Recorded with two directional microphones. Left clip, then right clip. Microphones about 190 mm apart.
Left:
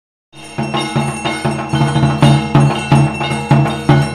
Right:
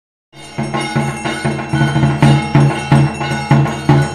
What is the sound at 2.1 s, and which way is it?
Music, centre (ahead or behind).